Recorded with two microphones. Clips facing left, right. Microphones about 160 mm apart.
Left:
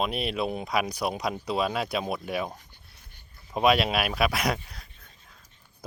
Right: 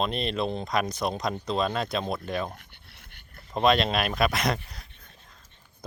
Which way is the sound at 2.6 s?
75° right (ahead or behind).